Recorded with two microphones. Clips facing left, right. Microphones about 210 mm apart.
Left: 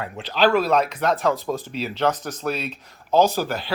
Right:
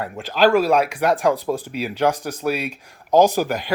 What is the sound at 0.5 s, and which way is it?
Speech, 10° right (ahead or behind).